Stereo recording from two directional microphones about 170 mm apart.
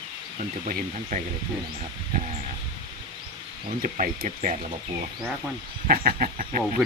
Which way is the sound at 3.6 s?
50° right (ahead or behind).